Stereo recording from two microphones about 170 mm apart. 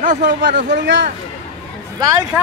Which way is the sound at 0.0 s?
50° right (ahead or behind).